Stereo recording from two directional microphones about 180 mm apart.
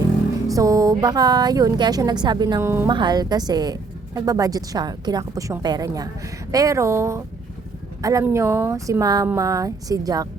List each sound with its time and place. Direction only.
0.5 s a woman's voice: 20° right (ahead or behind)